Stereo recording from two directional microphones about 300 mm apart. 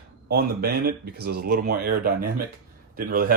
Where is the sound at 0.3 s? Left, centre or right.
Right.